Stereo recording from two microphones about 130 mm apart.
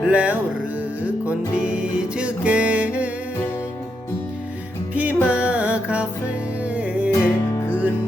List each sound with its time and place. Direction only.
0.1 s music: 10° right (ahead or behind)
4.9 s music: 10° right (ahead or behind)
7.1 s music: 20° left (ahead or behind)